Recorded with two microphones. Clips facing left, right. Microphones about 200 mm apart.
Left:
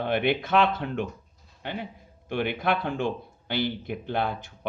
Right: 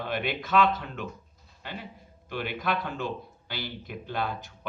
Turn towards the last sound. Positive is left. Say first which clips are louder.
# left 4 dB
turn(degrees=55)  # may be behind; listen again after turning